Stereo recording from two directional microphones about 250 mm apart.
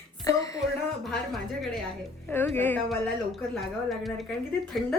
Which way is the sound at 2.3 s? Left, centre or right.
Centre.